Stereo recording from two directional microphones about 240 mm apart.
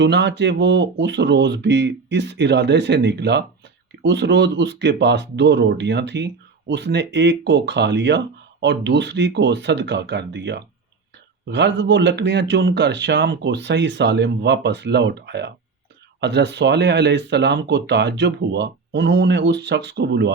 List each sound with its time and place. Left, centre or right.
0.0 s speech: right